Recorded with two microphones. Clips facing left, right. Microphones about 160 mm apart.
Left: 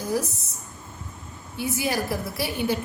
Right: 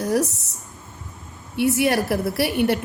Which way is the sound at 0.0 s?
70° right (ahead or behind).